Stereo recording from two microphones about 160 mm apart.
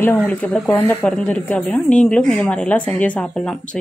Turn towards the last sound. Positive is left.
turn(degrees=10)  # may be behind; listen again after turning